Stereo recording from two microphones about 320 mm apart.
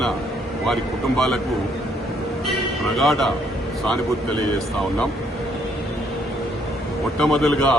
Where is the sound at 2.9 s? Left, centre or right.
Centre.